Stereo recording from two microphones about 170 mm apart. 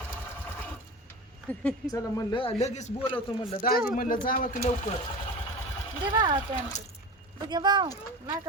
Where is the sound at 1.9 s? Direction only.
20° left (ahead or behind).